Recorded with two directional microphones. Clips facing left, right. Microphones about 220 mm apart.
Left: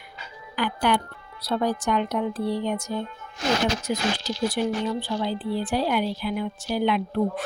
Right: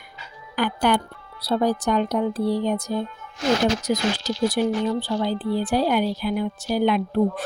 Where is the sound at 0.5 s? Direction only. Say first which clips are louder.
Right 3 dB; 45° right (ahead or behind).